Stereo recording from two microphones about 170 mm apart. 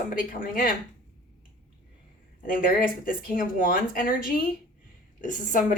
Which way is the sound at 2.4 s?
55° left (ahead or behind).